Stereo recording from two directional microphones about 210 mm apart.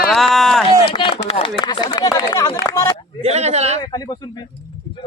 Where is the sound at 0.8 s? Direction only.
25° left (ahead or behind).